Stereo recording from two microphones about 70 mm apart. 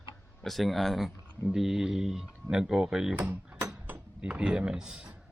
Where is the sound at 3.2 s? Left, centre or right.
Right.